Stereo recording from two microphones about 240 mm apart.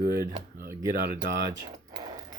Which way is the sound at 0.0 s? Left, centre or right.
Right.